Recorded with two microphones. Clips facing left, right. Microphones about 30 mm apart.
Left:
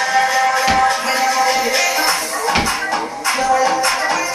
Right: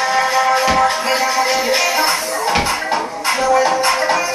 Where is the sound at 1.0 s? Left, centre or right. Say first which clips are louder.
Even; centre.